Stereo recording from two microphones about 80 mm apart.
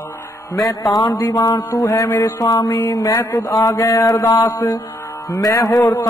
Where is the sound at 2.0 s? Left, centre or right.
Left.